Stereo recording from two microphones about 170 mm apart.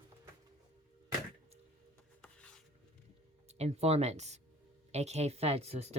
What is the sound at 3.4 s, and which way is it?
Speech, 40° right (ahead or behind).